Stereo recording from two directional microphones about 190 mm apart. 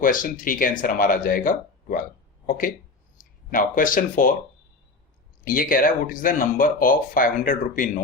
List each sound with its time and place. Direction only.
0.0 s speech: 45° left (ahead or behind)
5.5 s speech: 45° left (ahead or behind)